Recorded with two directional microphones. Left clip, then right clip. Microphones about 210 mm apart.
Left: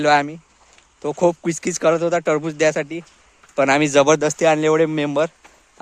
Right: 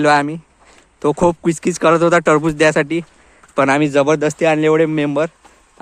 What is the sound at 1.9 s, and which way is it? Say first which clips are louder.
Speech: right 6 dB; 20° right (ahead or behind).